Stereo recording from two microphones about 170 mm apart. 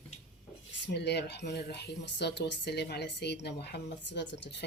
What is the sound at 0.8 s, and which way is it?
Speech, 85° left.